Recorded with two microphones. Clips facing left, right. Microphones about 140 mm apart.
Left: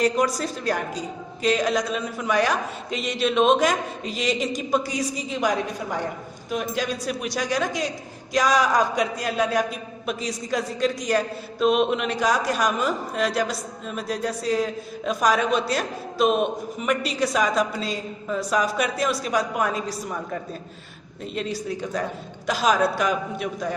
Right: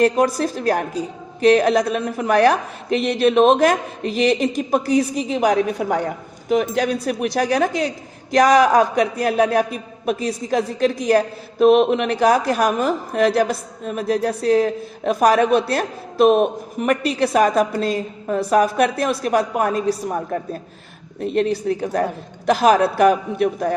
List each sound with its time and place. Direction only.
0.0 s a woman's voice: 55° right (ahead or behind)
21.2 s a woman's voice: 60° right (ahead or behind)